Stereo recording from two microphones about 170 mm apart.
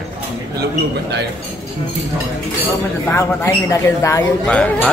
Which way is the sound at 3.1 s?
10° left (ahead or behind).